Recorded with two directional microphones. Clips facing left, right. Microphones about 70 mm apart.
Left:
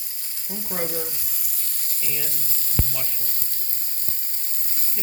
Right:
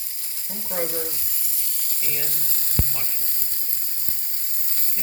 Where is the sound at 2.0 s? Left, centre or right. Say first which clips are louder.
Even; right.